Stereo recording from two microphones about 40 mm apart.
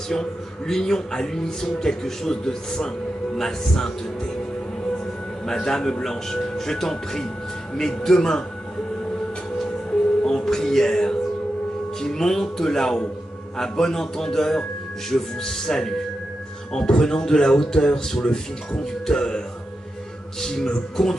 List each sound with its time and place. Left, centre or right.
0.1 s speech: centre
4.9 s a sound: centre
6.0 s speech: centre
10.2 s music: centre
12.0 s speech: centre